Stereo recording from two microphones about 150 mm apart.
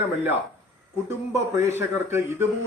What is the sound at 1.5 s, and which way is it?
Speech, 20° right (ahead or behind).